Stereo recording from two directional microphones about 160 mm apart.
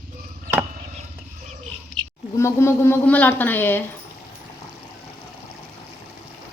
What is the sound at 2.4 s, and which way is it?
A woman's voice, 15° left (ahead or behind).